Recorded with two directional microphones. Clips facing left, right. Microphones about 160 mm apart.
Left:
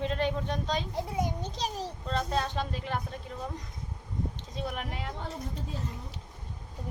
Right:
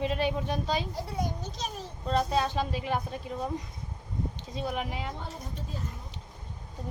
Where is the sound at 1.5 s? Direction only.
35° left (ahead or behind).